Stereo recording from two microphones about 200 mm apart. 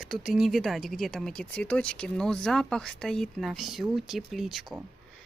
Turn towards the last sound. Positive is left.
turn(degrees=0)  # may be behind; listen again after turning